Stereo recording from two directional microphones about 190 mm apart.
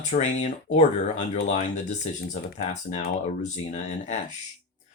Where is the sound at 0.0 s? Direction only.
40° left (ahead or behind).